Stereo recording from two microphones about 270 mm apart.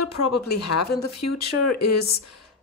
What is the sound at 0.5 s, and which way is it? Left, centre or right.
Speech, left.